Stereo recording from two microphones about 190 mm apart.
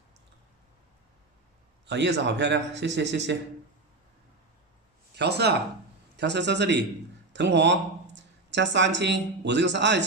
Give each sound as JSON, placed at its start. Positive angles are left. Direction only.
{"t": 1.9, "sound": "speech", "side_deg": -65}
{"t": 5.1, "sound": "a man's voice", "side_deg": -60}